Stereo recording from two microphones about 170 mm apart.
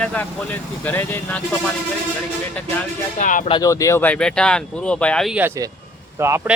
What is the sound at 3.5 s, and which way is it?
Speech, 20° left (ahead or behind).